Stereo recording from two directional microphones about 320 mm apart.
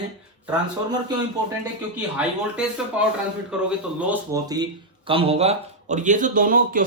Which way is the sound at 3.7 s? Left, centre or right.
Centre.